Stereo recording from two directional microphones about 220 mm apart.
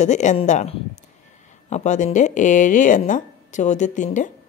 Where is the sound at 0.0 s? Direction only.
35° left (ahead or behind).